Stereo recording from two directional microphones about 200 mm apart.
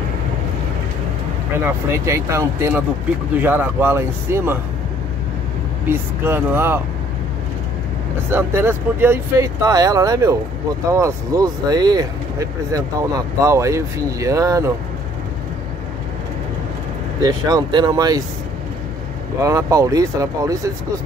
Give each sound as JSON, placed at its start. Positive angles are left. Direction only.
{"t": 1.6, "sound": "speech", "side_deg": -15}
{"t": 5.9, "sound": "speech", "side_deg": -10}
{"t": 8.3, "sound": "speech", "side_deg": -10}
{"t": 17.2, "sound": "speech", "side_deg": -20}
{"t": 19.4, "sound": "speech", "side_deg": -15}